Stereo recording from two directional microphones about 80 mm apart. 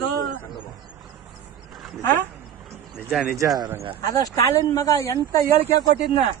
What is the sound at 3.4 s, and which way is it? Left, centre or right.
Speech, right.